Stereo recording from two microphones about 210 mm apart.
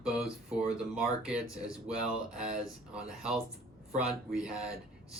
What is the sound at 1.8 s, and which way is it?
Speech, 5° right (ahead or behind).